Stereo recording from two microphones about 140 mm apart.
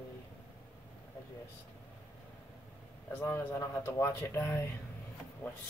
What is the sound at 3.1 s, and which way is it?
Speech, 15° left (ahead or behind).